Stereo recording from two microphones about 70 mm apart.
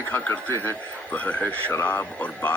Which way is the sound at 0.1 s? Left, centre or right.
Left.